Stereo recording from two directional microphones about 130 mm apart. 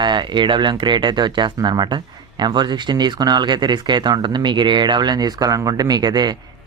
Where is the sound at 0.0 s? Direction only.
35° right (ahead or behind).